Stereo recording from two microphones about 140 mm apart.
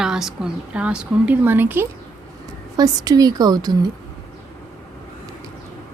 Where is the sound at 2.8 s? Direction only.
25° right (ahead or behind).